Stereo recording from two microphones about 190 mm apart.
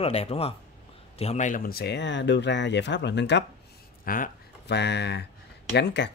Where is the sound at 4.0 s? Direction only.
45° left (ahead or behind).